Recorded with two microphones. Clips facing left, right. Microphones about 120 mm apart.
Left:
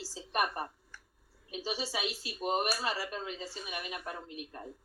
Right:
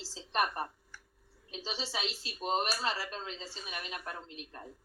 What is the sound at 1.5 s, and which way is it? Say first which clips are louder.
Speech: left 3 dB; 10° left (ahead or behind).